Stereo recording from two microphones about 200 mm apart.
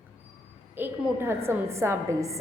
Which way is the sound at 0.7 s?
10° right (ahead or behind).